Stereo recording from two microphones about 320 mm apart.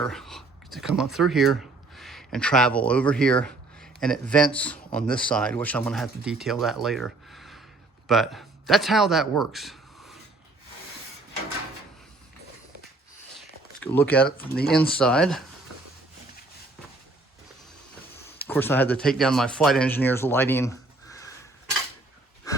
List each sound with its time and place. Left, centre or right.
0.0 s speech: centre
13.7 s speech: centre
14.5 s speech: left
14.8 s speech: centre
18.3 s speech: centre
22.5 s a sound: centre